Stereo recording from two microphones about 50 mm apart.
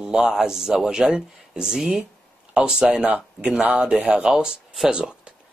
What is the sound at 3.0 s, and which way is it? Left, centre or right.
Speech, right.